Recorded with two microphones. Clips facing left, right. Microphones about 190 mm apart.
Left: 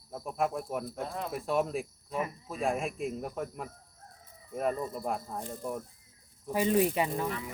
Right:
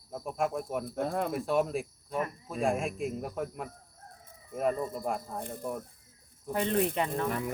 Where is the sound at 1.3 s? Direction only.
Centre (ahead or behind).